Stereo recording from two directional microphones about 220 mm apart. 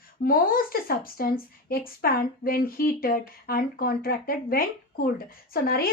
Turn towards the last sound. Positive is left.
turn(degrees=45)  # may be behind; listen again after turning